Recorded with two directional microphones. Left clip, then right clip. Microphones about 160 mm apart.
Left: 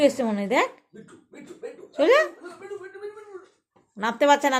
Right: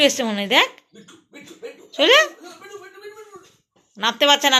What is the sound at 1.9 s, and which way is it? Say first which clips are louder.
Speech: right 4 dB; 5° left (ahead or behind).